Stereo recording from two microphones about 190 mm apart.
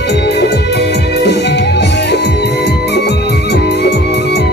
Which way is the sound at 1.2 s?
65° left (ahead or behind).